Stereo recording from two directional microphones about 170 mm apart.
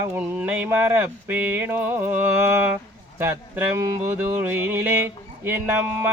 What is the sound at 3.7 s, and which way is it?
Music, 20° right (ahead or behind).